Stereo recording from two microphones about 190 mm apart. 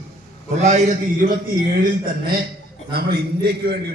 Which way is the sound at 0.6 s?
35° right (ahead or behind).